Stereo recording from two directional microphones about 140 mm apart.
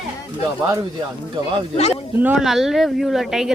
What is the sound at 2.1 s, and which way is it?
Speech, 10° right (ahead or behind).